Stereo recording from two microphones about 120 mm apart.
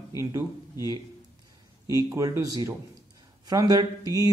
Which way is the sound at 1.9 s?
25° right (ahead or behind).